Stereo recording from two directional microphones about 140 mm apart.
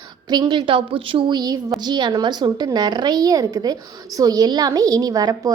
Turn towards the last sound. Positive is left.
turn(degrees=-25)  # may be behind; listen again after turning